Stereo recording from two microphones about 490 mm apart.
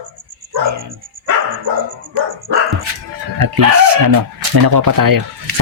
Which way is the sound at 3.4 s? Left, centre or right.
Right.